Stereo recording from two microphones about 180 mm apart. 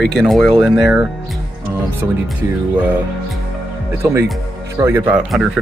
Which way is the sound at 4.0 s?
15° right (ahead or behind).